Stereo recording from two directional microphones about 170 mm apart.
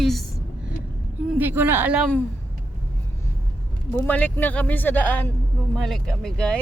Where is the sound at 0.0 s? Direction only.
Centre (ahead or behind).